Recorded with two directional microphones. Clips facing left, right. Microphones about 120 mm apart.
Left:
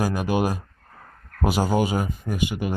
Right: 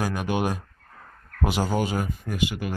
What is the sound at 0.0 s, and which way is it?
Speech, 5° left (ahead or behind).